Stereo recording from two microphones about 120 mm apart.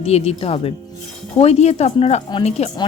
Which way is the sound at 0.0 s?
60° left (ahead or behind).